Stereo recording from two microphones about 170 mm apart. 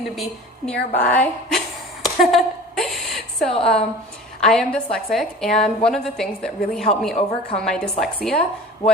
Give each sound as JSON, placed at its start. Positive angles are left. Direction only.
{"t": 0.2, "sound": "a woman's voice", "side_deg": 5}
{"t": 0.9, "sound": "a sound", "side_deg": 10}
{"t": 3.6, "sound": "a woman's voice", "side_deg": 5}
{"t": 7.2, "sound": "a woman's voice", "side_deg": 35}
{"t": 7.5, "sound": "a woman's voice", "side_deg": 5}